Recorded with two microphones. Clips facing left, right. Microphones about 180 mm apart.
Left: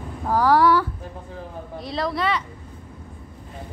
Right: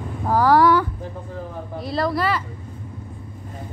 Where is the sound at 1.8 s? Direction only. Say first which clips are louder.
Right 3 dB; centre (ahead or behind).